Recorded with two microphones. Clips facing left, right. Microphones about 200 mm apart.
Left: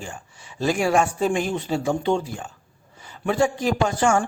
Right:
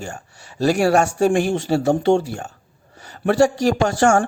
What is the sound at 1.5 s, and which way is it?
Speech, 80° right.